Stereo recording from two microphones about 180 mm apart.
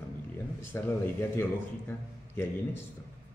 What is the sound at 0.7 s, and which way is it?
A man's voice, 10° left (ahead or behind).